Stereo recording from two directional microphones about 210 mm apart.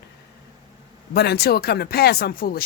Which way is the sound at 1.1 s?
50° left (ahead or behind).